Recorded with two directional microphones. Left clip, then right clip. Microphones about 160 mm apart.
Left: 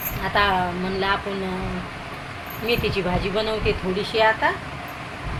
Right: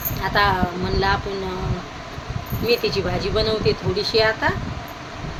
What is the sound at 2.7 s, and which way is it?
A woman's voice, 15° right (ahead or behind).